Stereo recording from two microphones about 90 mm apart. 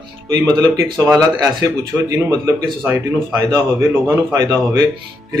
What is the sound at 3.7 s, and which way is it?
Speech, 40° right (ahead or behind).